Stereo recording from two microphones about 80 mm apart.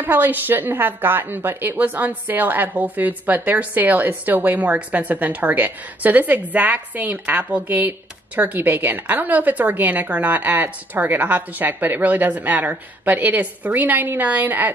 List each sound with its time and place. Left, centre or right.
0.0 s a woman's voice: right